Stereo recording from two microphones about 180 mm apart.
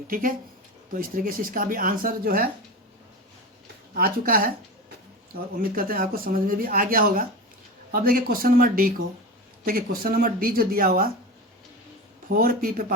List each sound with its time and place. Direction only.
0.1 s speech: 50° right (ahead or behind)
3.9 s speech: 55° right (ahead or behind)
12.3 s speech: 55° right (ahead or behind)